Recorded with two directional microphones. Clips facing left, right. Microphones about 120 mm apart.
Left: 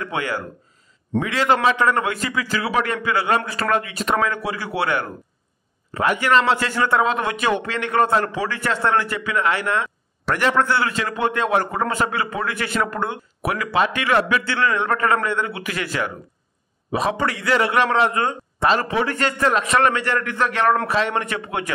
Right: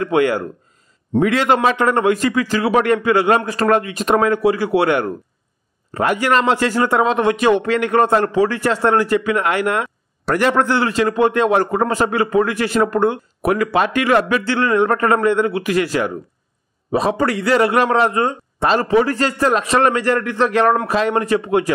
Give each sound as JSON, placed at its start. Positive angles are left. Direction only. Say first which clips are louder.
{"t": 0.0, "sound": "a man's voice", "louder": "right 9 dB", "side_deg": -45}
{"t": 1.1, "sound": "a man's voice", "louder": "right 7 dB", "side_deg": -20}
{"t": 1.5, "sound": "a man's voice", "louder": "left 2 dB", "side_deg": -45}